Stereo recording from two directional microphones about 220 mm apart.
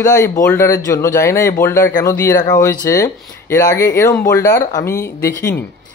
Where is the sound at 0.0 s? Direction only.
15° left (ahead or behind).